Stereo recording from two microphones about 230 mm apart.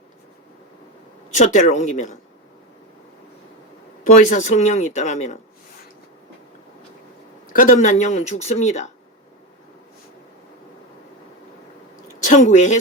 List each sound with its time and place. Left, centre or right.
1.3 s speech: left
4.0 s speech: left
7.5 s speech: left
12.2 s speech: left